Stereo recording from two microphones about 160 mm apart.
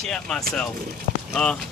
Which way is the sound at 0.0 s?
5° left (ahead or behind).